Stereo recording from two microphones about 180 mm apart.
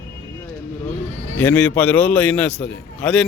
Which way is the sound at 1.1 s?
40° right (ahead or behind).